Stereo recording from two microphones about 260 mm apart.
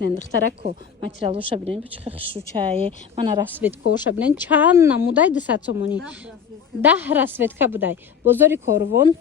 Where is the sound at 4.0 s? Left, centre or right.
Centre.